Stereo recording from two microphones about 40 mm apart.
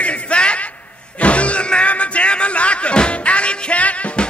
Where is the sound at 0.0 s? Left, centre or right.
Left.